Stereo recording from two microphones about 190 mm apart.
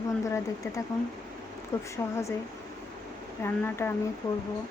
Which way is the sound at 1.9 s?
15° left (ahead or behind).